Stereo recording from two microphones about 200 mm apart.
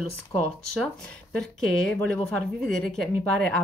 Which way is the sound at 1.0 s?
5° left (ahead or behind).